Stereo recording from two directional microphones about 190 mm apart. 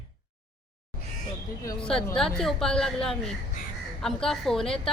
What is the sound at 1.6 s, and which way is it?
Speech, 20° left (ahead or behind).